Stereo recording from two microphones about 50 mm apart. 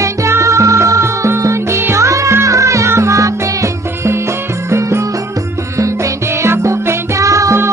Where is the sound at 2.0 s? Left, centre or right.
Right.